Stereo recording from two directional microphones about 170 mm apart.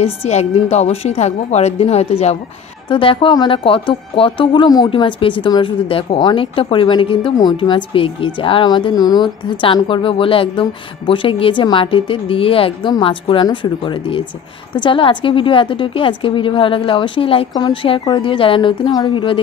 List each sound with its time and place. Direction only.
0.0 s speech: 40° left (ahead or behind)